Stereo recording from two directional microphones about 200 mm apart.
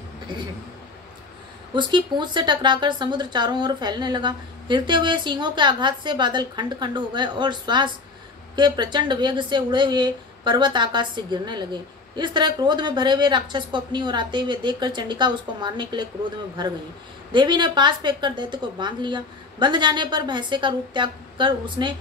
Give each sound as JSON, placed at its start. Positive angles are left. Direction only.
{"t": 1.7, "sound": "a woman's voice", "side_deg": -25}
{"t": 17.3, "sound": "a woman's voice", "side_deg": -25}